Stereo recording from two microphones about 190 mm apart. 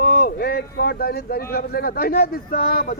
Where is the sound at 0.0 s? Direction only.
55° left (ahead or behind).